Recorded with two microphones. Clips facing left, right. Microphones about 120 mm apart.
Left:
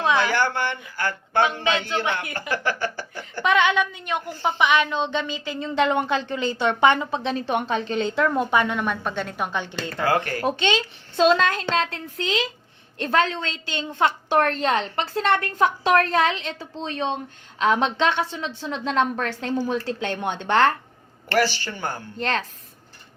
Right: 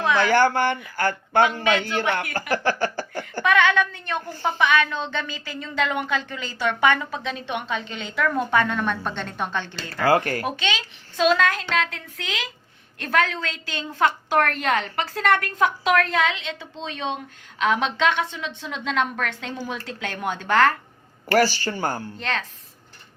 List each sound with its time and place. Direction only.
0.0 s a sound: 20° left (ahead or behind)
0.3 s speech: 45° right (ahead or behind)
1.5 s a woman's voice: 20° left (ahead or behind)
2.5 s speech: 40° right (ahead or behind)
3.4 s a woman's voice: 20° left (ahead or behind)
10.4 s a woman's voice: 30° left (ahead or behind)
21.3 s speech: 40° right (ahead or behind)
22.2 s a woman's voice: 40° left (ahead or behind)